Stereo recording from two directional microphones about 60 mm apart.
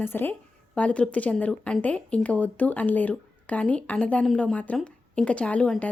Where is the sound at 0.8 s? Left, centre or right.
Left.